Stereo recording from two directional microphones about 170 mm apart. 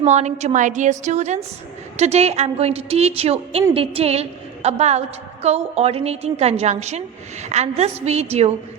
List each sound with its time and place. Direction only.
0.0 s a woman's voice: 40° right (ahead or behind)